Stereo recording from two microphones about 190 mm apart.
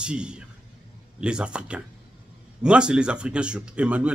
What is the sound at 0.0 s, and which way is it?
Speech, 5° right (ahead or behind).